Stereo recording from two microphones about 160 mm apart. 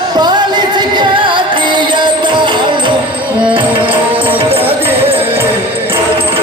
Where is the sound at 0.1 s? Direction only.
25° right (ahead or behind).